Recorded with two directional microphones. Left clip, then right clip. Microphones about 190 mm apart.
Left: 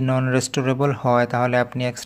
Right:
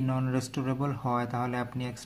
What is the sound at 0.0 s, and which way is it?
Speech, 45° left (ahead or behind).